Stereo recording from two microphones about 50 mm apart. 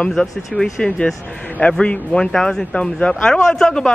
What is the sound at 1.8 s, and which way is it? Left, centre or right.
Speech, left.